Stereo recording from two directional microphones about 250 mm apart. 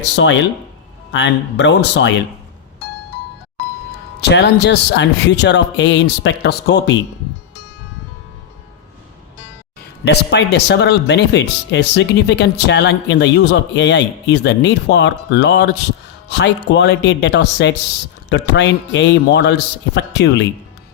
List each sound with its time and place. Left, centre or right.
0.0 s speech: left
4.2 s speech: left
10.0 s speech: left